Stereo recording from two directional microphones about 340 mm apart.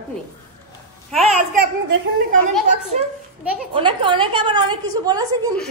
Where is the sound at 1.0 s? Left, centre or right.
Centre.